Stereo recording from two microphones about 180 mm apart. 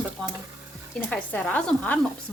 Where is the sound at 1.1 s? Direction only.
10° left (ahead or behind).